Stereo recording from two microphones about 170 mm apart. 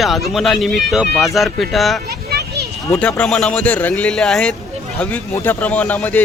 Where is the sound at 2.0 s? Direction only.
70° right (ahead or behind).